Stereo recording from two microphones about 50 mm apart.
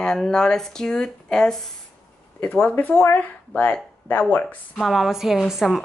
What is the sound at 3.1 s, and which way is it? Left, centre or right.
Speech, left.